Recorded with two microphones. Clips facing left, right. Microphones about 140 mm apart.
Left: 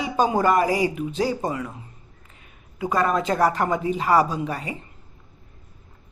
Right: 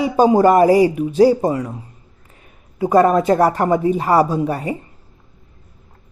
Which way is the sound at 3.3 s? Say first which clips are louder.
Right 6 dB; 40° right (ahead or behind).